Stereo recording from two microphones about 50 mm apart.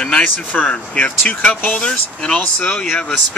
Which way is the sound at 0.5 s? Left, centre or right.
Left.